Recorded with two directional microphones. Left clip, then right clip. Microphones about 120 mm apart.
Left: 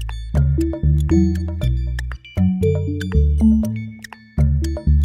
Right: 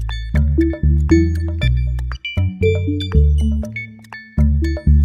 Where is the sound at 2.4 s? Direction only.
10° left (ahead or behind).